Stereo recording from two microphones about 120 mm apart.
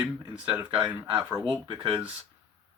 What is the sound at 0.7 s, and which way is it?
Speech, 40° right (ahead or behind).